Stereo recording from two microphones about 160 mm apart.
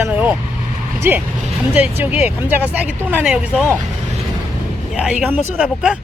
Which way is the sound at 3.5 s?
10° left (ahead or behind).